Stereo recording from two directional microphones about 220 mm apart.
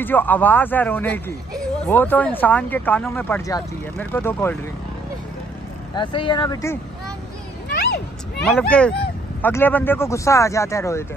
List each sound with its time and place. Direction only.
0.0 s speech: 10° left (ahead or behind)
5.9 s speech: 20° left (ahead or behind)
8.5 s speech: 5° left (ahead or behind)